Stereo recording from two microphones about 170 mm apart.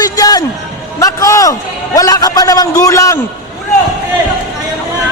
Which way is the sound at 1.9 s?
20° left (ahead or behind).